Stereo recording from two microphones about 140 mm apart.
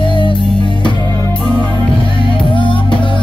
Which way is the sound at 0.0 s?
35° left (ahead or behind).